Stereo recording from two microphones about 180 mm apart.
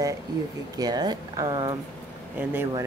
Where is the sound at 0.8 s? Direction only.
20° right (ahead or behind).